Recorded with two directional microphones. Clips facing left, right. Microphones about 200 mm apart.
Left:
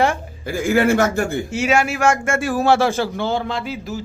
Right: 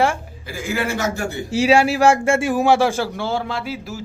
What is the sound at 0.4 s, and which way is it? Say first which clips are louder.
Speech: left 7 dB; 50° left (ahead or behind).